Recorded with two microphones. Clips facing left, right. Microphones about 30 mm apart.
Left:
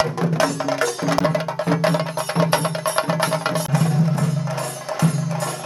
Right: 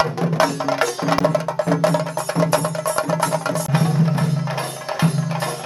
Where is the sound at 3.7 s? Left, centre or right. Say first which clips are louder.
Right 3 dB; right.